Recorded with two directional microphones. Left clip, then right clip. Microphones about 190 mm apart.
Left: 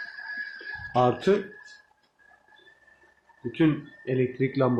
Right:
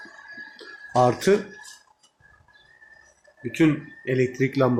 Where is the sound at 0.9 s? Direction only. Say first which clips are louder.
Right 3 dB; 15° right (ahead or behind).